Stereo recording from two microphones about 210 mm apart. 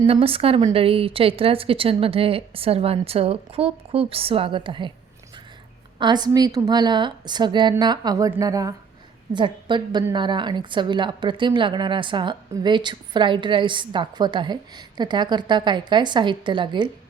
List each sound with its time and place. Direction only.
0.1 s a woman's voice: 25° right (ahead or behind)
6.0 s a woman's voice: 20° right (ahead or behind)